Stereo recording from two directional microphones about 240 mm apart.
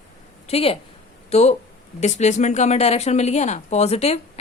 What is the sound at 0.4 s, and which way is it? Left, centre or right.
A woman's voice, left.